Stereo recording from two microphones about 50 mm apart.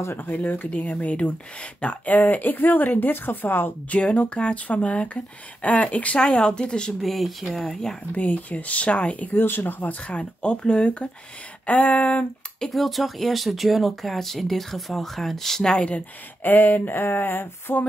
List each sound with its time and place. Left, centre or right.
0.2 s speech: left
4.0 s speech: left
6.1 s speech: centre
7.0 s speech: centre
8.1 s speech: left
9.4 s speech: left
10.0 s speech: left
11.6 s speech: left
12.5 s speech: centre
16.4 s speech: left